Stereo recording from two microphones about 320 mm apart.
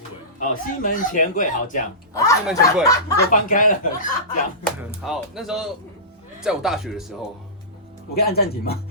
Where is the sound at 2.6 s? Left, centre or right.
Centre.